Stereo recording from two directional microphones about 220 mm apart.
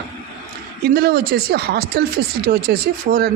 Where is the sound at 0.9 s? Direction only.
45° right (ahead or behind).